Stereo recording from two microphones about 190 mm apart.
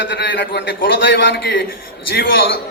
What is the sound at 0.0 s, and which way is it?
A man's voice, 65° left (ahead or behind).